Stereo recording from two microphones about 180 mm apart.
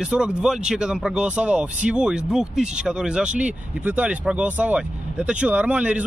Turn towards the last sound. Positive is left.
turn(degrees=-10)  # may be behind; listen again after turning